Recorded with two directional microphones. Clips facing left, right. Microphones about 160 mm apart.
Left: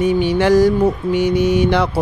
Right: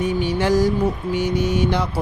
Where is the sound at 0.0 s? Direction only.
75° left (ahead or behind).